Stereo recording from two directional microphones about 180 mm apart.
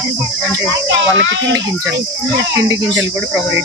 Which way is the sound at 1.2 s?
85° right.